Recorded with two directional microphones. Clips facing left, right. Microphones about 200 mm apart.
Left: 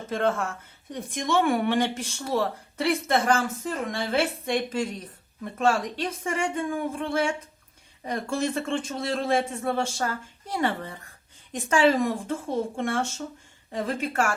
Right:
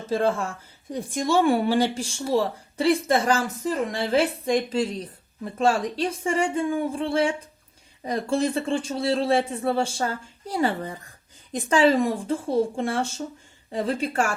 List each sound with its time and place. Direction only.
0.1 s speech: 30° right (ahead or behind)